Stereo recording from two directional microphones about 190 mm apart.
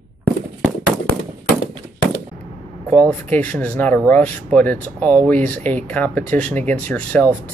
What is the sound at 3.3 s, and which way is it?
Speech, 10° left (ahead or behind).